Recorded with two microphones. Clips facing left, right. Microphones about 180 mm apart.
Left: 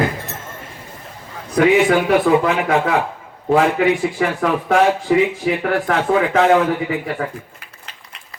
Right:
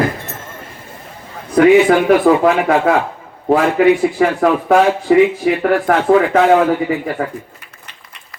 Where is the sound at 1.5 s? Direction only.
50° right (ahead or behind).